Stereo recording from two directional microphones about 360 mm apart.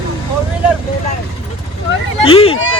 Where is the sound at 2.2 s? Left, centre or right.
Centre.